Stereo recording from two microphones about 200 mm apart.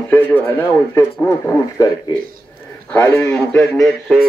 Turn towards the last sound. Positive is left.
turn(degrees=0)  # may be behind; listen again after turning